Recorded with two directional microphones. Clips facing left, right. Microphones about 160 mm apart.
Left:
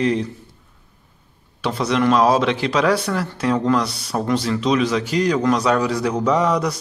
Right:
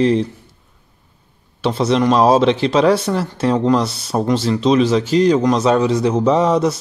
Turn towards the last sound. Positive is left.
turn(degrees=-25)  # may be behind; listen again after turning